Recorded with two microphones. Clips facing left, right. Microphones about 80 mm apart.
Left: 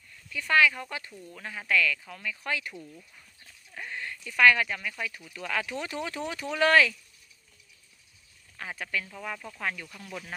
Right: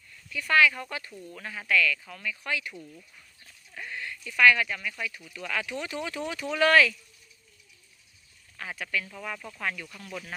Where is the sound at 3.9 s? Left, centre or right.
Left.